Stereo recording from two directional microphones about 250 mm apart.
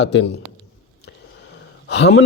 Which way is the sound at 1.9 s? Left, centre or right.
Left.